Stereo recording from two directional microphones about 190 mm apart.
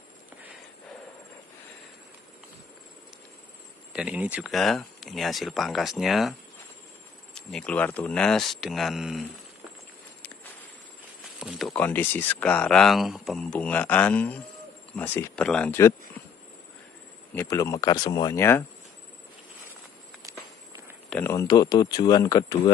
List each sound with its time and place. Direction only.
3.9 s speech: 5° right (ahead or behind)
7.3 s speech: 5° left (ahead or behind)
11.3 s speech: centre (ahead or behind)
17.3 s speech: 15° left (ahead or behind)
21.1 s speech: 15° left (ahead or behind)